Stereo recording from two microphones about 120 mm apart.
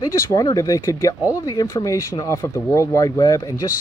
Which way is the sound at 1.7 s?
25° left (ahead or behind).